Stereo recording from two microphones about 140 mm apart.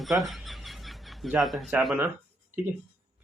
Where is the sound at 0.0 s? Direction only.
Centre (ahead or behind).